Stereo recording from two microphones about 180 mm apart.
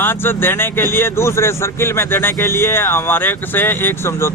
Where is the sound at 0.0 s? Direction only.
10° left (ahead or behind).